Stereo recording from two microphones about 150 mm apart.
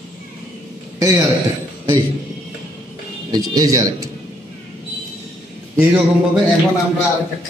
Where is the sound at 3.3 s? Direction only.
25° right (ahead or behind).